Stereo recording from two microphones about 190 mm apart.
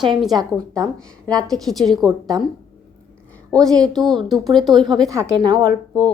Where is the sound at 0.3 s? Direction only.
20° right (ahead or behind).